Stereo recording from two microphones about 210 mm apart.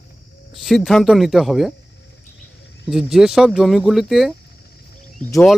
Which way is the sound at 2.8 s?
Centre (ahead or behind).